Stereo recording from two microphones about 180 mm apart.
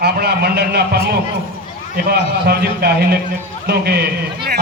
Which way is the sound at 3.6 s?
60° right (ahead or behind).